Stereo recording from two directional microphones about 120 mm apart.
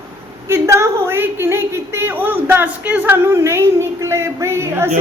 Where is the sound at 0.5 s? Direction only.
25° right (ahead or behind).